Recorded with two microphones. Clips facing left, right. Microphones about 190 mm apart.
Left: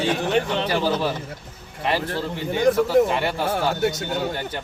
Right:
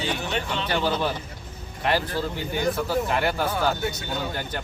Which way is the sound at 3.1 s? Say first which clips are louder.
Left 1 dB; centre (ahead or behind).